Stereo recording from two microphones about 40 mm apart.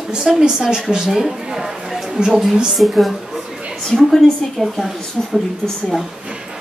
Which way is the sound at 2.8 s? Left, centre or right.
Centre.